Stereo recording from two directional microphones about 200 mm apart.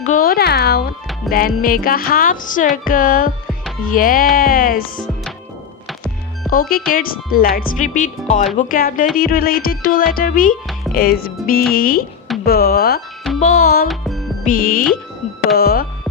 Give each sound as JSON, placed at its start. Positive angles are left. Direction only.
{"t": 0.0, "sound": "music", "side_deg": 45}
{"t": 6.5, "sound": "music", "side_deg": 45}
{"t": 10.5, "sound": "music", "side_deg": 0}
{"t": 10.9, "sound": "music", "side_deg": 50}
{"t": 13.8, "sound": "music", "side_deg": 0}
{"t": 14.4, "sound": "music", "side_deg": 45}